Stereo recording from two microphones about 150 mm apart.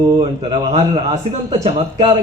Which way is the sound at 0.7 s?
45° right (ahead or behind).